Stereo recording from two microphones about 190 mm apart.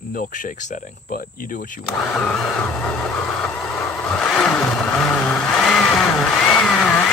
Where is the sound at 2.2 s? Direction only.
5° left (ahead or behind).